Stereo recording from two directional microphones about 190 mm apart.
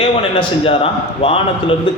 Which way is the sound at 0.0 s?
30° left (ahead or behind).